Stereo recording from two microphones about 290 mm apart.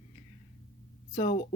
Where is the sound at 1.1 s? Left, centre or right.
Left.